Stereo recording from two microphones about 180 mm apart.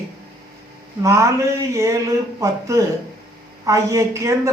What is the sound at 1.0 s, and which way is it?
A man's voice, 15° right (ahead or behind).